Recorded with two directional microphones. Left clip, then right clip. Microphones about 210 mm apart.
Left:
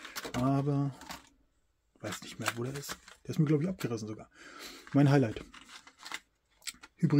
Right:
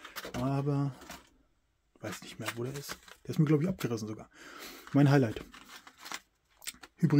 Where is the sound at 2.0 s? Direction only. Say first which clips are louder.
Left 2 dB; 5° left (ahead or behind).